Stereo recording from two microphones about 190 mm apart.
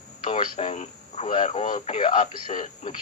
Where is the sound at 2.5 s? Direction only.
40° left (ahead or behind).